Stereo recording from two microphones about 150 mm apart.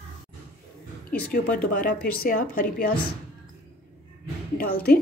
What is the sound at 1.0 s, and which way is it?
A woman's voice, 75° left (ahead or behind).